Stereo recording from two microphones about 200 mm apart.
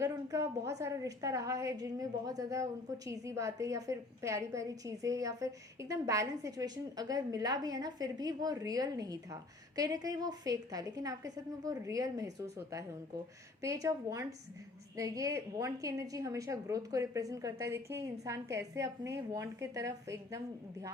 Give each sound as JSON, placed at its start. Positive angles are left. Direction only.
{"t": 0.0, "sound": "a woman's voice", "side_deg": -15}